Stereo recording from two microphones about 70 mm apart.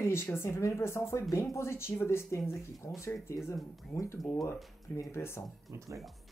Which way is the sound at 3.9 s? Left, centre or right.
Left.